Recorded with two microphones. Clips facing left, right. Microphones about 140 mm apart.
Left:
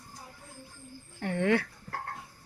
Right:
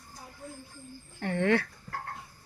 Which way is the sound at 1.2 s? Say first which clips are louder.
Right 1 dB; 10° left (ahead or behind).